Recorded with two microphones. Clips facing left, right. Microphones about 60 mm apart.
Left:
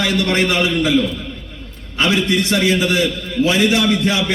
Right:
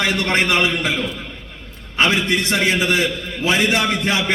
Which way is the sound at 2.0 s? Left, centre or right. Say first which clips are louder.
Left 1 dB; right.